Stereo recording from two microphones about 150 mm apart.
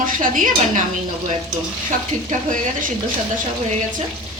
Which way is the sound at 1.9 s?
55° right (ahead or behind).